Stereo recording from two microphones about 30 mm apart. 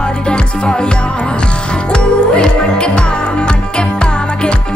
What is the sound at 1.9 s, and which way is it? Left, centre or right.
Music, left.